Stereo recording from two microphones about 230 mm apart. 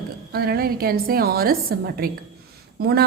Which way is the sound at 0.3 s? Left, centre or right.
Right.